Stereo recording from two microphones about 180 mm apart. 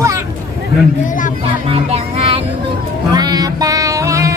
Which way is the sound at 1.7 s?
30° right (ahead or behind).